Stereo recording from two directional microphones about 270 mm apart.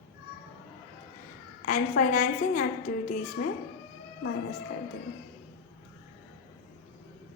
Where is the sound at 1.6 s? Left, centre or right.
Left.